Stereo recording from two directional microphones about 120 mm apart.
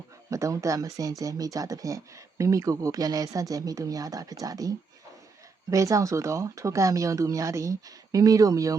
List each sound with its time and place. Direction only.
0.3 s speech: 25° right (ahead or behind)
5.7 s speech: 25° right (ahead or behind)